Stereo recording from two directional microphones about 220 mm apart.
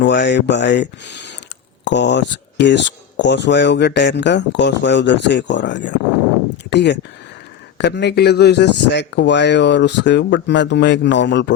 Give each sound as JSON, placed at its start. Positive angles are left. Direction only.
{"t": 0.0, "sound": "speech", "side_deg": 50}